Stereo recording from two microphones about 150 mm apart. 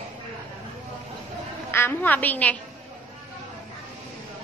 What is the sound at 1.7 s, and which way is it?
Speech, 15° left (ahead or behind).